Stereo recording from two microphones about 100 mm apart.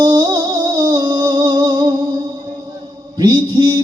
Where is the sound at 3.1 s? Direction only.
45° right (ahead or behind).